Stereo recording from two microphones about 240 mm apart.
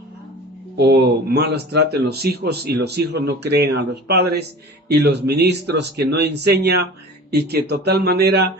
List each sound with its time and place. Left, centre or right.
0.8 s speech: right